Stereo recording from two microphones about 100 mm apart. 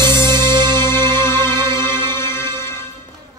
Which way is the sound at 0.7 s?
25° left (ahead or behind).